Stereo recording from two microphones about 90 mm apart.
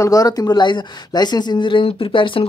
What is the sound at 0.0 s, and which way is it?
Speech, 40° left (ahead or behind).